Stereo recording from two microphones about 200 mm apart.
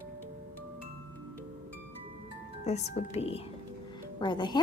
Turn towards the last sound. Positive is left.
turn(degrees=25)  # may be behind; listen again after turning